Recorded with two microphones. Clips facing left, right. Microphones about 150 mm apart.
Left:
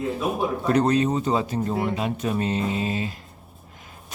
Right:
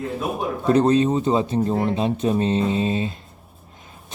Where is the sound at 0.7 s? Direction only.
25° right (ahead or behind).